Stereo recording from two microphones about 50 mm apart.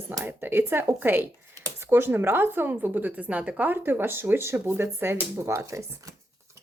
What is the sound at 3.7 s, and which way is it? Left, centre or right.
Speech, right.